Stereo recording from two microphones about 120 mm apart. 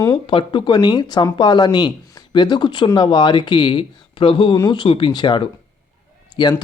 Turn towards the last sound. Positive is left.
turn(degrees=40)  # may be behind; listen again after turning